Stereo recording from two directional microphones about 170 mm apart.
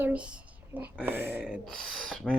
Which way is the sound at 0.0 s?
5° right (ahead or behind).